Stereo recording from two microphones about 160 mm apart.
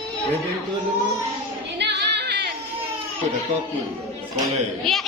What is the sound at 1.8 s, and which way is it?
Music, 90° right.